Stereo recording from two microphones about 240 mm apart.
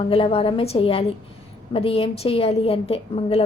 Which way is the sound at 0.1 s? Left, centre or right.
Left.